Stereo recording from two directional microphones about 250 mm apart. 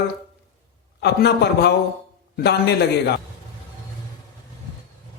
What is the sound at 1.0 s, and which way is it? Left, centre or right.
A man's voice, left.